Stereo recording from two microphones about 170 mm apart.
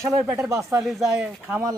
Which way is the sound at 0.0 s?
10° right (ahead or behind).